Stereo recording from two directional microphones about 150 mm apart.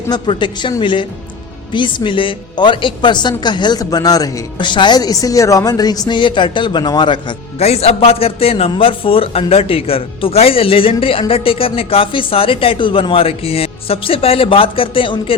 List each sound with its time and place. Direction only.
0.1 s a woman's voice: 30° left (ahead or behind)
7.6 s speech: 45° left (ahead or behind)